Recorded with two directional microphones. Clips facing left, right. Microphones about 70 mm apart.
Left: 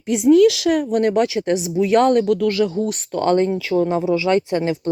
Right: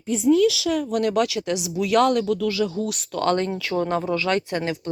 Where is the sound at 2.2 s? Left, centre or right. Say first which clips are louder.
Left 5 dB; left.